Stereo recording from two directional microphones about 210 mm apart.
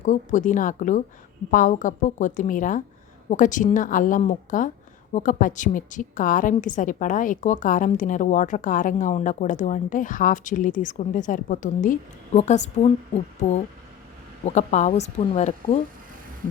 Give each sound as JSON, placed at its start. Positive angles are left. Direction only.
{"t": 0.0, "sound": "a woman's voice", "side_deg": 35}
{"t": 14.4, "sound": "a woman's voice", "side_deg": 35}